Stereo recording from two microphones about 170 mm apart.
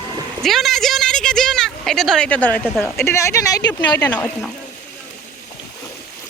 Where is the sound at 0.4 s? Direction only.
Centre (ahead or behind); by 4.0 s 25° left (ahead or behind).